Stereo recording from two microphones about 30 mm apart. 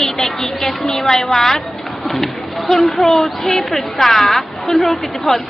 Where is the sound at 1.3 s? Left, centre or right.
Centre.